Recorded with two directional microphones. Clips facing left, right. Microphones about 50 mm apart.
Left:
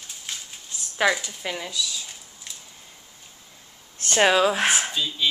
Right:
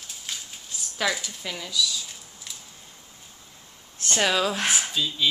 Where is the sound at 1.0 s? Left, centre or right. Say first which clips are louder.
Left 5 dB; left.